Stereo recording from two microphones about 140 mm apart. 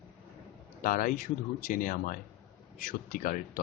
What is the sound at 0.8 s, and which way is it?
Speech, 85° left.